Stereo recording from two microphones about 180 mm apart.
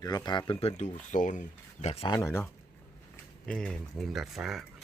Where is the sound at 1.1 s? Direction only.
45° left (ahead or behind).